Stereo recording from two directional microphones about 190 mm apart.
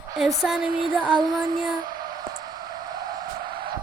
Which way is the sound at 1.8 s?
20° right (ahead or behind).